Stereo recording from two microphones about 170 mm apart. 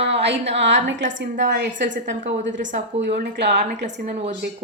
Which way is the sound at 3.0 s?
80° right.